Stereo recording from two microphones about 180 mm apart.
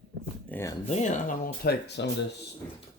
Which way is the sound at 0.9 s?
40° left (ahead or behind).